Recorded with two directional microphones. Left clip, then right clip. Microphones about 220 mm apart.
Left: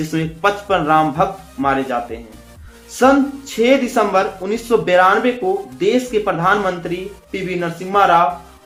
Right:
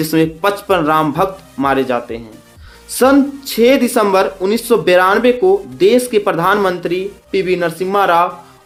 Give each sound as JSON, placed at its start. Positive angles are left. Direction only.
{"t": 0.0, "sound": "speech", "side_deg": -50}